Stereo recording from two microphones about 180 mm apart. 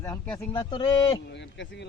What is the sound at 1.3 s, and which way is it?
Speech, 80° left.